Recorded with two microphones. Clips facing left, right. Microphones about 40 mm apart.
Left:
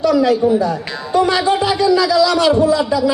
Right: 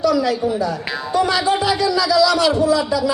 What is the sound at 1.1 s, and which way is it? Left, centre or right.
A man's voice, left.